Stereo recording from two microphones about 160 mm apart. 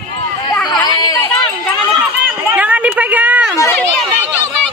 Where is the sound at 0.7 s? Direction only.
25° left (ahead or behind).